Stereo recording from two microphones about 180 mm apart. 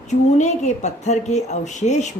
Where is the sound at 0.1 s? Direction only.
40° left (ahead or behind).